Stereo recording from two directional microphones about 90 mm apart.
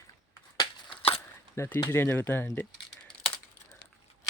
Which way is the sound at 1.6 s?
30° left (ahead or behind).